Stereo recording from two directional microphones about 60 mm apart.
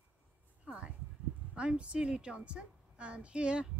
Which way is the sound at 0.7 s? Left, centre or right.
Centre.